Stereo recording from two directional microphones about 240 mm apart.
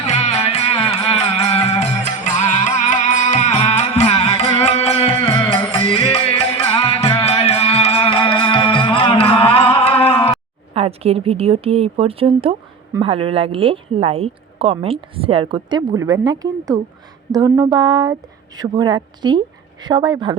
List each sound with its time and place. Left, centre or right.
0.1 s music: left
10.0 s a sound: left
10.8 s speech: right